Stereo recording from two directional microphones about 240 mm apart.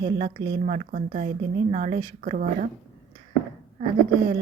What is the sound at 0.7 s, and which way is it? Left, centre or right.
A woman's voice, right.